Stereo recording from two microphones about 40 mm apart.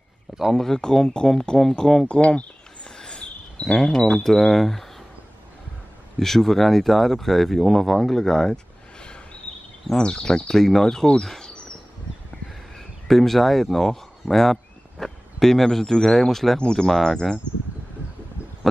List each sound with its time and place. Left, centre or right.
0.5 s speech: centre
2.0 s a sound: left
3.0 s speech: left; by 4.8 s centre
6.1 s speech: centre
9.9 s speech: centre
11.2 s a sound: centre
12.7 s speech: centre
16.5 s speech: left
16.8 s speech: centre